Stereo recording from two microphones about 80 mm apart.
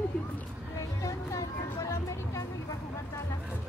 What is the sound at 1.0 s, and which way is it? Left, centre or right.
Music, left.